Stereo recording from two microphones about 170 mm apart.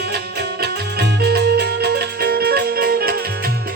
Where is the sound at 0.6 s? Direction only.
70° right (ahead or behind).